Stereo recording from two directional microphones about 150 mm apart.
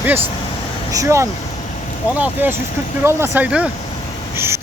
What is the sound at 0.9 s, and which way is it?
Speech, 20° right (ahead or behind).